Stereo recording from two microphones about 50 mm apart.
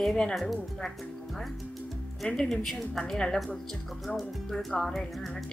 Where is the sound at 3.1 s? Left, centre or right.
Centre.